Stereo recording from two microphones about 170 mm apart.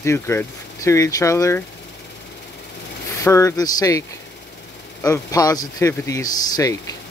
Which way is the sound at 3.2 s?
15° left (ahead or behind).